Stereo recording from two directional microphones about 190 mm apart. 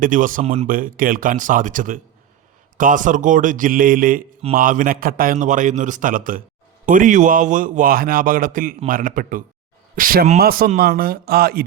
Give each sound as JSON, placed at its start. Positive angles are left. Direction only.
{"t": 0.0, "sound": "a man's voice", "side_deg": -45}
{"t": 0.7, "sound": "a man's voice", "side_deg": -45}